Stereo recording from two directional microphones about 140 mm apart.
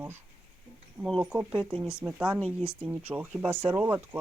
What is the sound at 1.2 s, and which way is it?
Speech, 10° right (ahead or behind).